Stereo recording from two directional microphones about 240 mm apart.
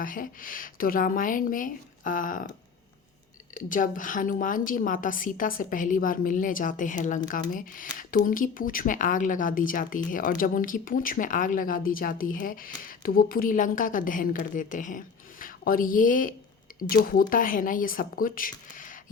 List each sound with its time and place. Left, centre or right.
0.0 s speech: left
3.5 s speech: left